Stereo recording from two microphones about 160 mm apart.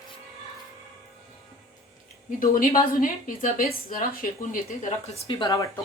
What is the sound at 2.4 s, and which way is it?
A woman's voice, 60° left (ahead or behind).